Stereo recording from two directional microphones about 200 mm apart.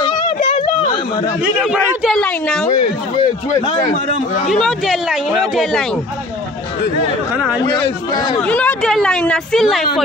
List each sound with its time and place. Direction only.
0.0 s a sound: 25° left (ahead or behind)
1.4 s speech: centre (ahead or behind)
2.8 s speech: 30° left (ahead or behind)
4.5 s speech: centre (ahead or behind)
7.6 s speech: 20° left (ahead or behind)
8.4 s speech: 5° left (ahead or behind)